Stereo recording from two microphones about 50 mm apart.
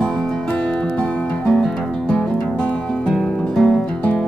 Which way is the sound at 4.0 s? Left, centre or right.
Left.